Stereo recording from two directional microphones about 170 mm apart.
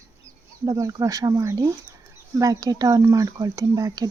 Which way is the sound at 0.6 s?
20° right (ahead or behind).